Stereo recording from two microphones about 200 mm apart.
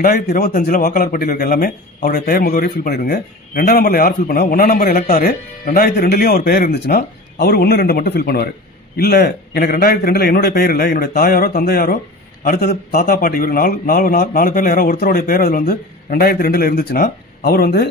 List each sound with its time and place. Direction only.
0.0 s a man's voice: 45° left (ahead or behind)